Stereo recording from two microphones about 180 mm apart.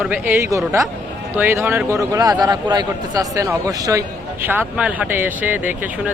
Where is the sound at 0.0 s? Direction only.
10° right (ahead or behind).